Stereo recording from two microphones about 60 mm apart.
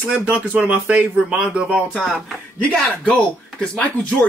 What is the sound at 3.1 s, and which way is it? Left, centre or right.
Speech, centre.